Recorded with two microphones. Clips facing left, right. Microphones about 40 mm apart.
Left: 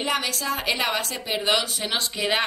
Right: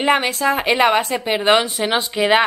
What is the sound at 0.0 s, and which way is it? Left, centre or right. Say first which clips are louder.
A woman's voice: right 9 dB; right.